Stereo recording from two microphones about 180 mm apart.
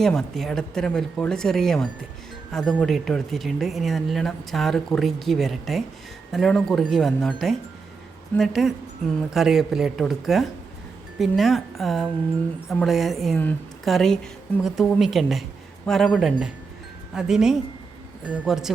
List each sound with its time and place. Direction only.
0.0 s speech: centre (ahead or behind)